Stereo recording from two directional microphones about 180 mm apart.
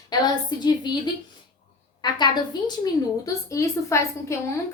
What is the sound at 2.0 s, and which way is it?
A woman's voice, 25° left (ahead or behind).